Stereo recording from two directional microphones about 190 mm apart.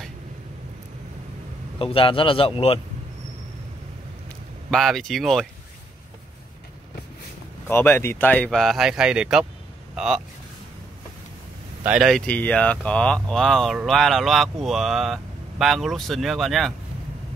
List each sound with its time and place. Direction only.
1.8 s speech: 30° left (ahead or behind)
4.6 s speech: centre (ahead or behind)
7.6 s speech: 10° left (ahead or behind)
11.8 s speech: 5° right (ahead or behind)